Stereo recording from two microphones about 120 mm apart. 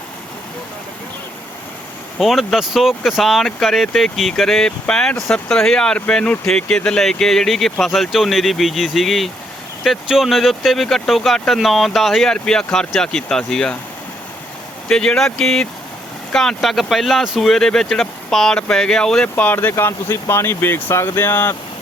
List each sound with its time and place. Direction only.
2.1 s speech: centre (ahead or behind)
14.8 s speech: 5° left (ahead or behind)